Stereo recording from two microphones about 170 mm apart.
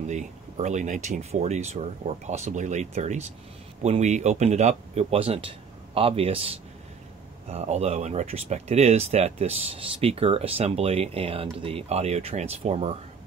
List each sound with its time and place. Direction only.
0.0 s speech: 45° right (ahead or behind)